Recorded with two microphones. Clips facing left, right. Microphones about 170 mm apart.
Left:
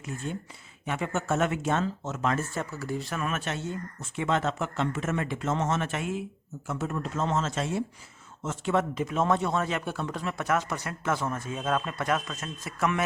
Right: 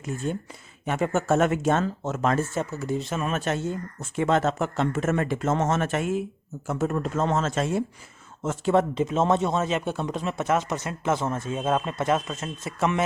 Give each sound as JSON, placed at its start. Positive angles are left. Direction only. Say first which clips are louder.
{"t": 0.9, "sound": "speech", "louder": "right 6 dB", "side_deg": -45}
{"t": 2.6, "sound": "speech", "louder": "right 5 dB", "side_deg": -20}
{"t": 3.3, "sound": "speech", "louder": "right 6 dB", "side_deg": -45}
{"t": 8.6, "sound": "speech", "louder": "right 5 dB", "side_deg": -35}